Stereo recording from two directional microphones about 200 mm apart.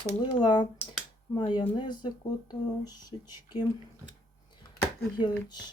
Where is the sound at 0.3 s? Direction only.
20° left (ahead or behind).